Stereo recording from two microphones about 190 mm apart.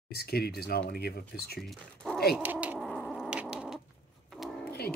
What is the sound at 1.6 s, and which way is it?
Speech, centre (ahead or behind).